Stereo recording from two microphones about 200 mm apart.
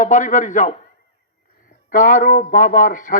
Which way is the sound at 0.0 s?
40° left (ahead or behind).